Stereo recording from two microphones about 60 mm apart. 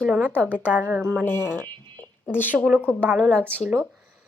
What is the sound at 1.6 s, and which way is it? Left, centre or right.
Speech, left.